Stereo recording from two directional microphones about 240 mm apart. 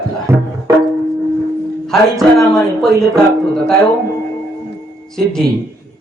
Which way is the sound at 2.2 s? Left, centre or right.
Centre.